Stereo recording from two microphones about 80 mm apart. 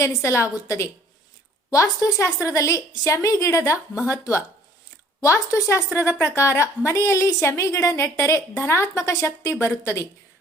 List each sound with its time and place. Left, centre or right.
0.0 s a woman's voice: left